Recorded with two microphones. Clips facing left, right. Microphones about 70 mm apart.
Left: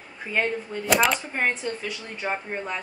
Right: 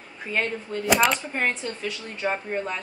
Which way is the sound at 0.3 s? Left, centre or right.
Centre.